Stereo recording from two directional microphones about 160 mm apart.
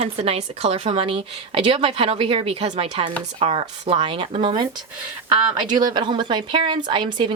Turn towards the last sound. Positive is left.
turn(degrees=-30)  # may be behind; listen again after turning